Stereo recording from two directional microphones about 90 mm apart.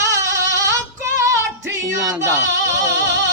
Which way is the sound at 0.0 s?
35° right (ahead or behind).